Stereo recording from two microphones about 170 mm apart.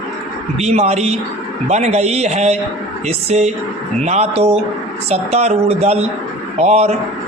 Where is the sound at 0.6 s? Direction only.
40° right (ahead or behind).